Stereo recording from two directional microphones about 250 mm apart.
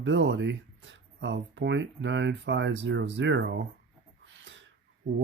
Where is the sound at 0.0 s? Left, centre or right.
Right.